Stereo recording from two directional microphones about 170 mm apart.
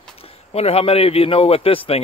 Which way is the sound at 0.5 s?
35° left (ahead or behind).